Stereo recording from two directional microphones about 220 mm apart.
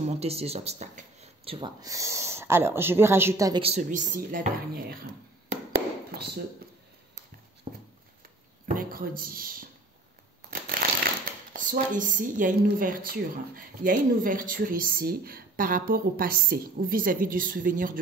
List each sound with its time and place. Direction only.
0.0 s speech: 30° right (ahead or behind)
3.6 s a woman's voice: 35° right (ahead or behind)
7.7 s a sound: 30° right (ahead or behind)
8.7 s a woman's voice: 40° right (ahead or behind)
10.5 s crushing: 40° right (ahead or behind)
11.5 s a woman's voice: 35° right (ahead or behind)